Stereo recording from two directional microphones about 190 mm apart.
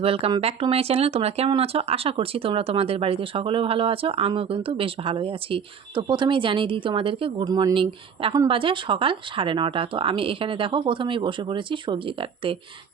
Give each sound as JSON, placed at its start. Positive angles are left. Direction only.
{"t": 0.0, "sound": "speech", "side_deg": -30}